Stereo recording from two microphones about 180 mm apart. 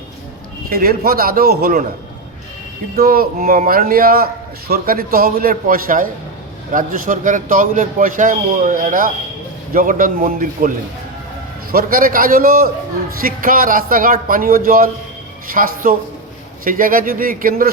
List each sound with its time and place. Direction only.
0.7 s a man's voice: 55° right (ahead or behind)
2.9 s a man's voice: 55° right (ahead or behind)